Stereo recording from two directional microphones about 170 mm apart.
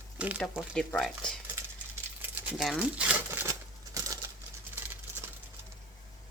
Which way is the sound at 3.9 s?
20° right (ahead or behind).